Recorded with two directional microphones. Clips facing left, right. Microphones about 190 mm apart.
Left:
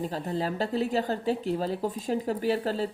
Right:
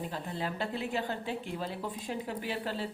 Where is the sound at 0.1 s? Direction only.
40° left (ahead or behind).